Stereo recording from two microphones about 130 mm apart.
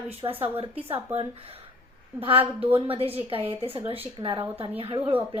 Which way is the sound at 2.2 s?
45° right (ahead or behind).